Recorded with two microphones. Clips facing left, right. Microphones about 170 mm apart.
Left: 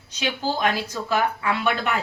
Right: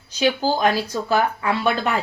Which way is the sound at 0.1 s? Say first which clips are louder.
Right 6 dB; 35° right (ahead or behind).